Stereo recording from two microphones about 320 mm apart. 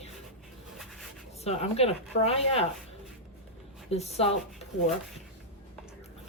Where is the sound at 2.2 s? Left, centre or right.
Centre.